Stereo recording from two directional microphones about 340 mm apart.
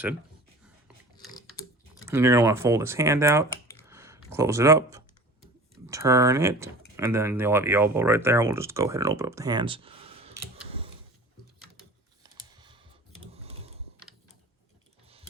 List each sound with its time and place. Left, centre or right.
1.5 s a sound: centre
2.0 s speech: centre
3.8 s a sound: centre
5.8 s speech: centre
12.2 s typing: centre
13.3 s sewing machine: centre